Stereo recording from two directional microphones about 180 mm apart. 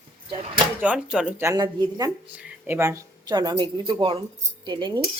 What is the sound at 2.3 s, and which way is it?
Speech, 10° right (ahead or behind).